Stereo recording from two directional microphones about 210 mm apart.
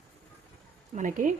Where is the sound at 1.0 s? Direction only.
35° right (ahead or behind).